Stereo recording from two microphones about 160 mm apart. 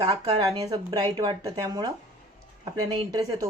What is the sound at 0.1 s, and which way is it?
Speech, 25° right (ahead or behind).